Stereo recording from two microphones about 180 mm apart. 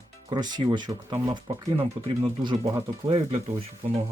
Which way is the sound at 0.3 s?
25° right (ahead or behind).